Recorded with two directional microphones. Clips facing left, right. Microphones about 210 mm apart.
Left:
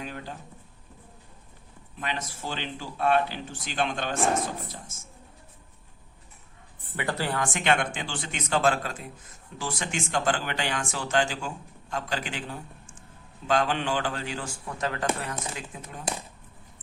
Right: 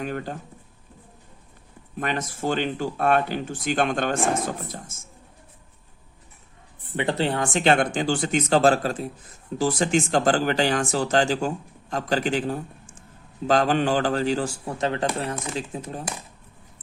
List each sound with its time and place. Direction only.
0.0 s speech: 50° right (ahead or behind)
2.0 s speech: 50° right (ahead or behind)
6.9 s speech: 25° right (ahead or behind)